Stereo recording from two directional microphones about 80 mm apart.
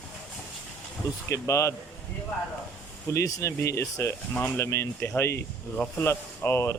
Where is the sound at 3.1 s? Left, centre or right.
Left.